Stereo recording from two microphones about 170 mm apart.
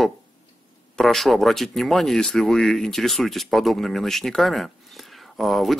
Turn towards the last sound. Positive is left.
turn(degrees=0)  # may be behind; listen again after turning